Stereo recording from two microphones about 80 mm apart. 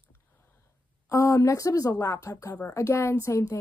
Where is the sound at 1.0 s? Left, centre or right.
Left.